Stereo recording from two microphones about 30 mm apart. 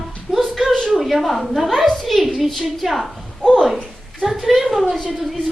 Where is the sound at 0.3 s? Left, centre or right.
Centre.